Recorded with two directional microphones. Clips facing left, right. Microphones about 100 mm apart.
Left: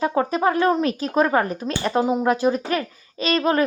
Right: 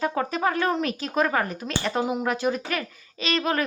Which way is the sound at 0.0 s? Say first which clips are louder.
Left 5 dB; 30° left (ahead or behind).